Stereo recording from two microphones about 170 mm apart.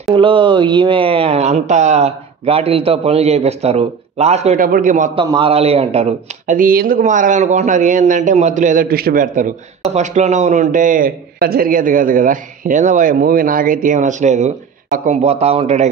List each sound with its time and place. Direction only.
0.1 s speech: 30° right (ahead or behind); by 5.1 s 45° right (ahead or behind)
5.1 s a man's voice: 25° right (ahead or behind)